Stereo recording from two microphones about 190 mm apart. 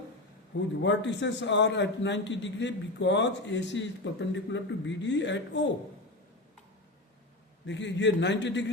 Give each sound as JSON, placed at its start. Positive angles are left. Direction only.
{"t": 0.8, "sound": "a man's voice", "side_deg": 70}
{"t": 7.7, "sound": "a man's voice", "side_deg": 70}